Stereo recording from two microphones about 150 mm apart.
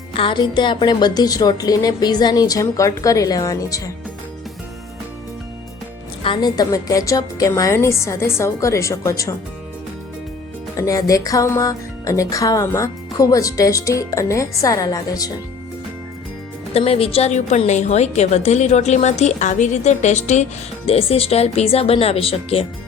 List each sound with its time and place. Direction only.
0.2 s speech: 35° left (ahead or behind)
6.2 s speech: 30° left (ahead or behind)
10.8 s speech: 20° left (ahead or behind)
16.7 s a woman's voice: 40° left (ahead or behind)